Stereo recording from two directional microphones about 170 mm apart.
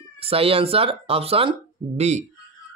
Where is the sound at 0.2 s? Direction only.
35° right (ahead or behind).